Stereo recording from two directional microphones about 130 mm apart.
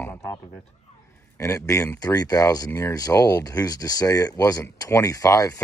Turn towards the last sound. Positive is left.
turn(degrees=25)  # may be behind; listen again after turning